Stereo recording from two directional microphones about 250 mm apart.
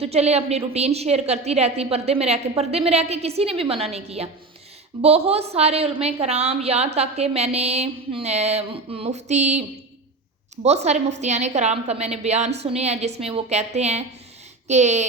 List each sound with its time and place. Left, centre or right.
0.0 s a woman's voice: right
10.8 s a woman's voice: right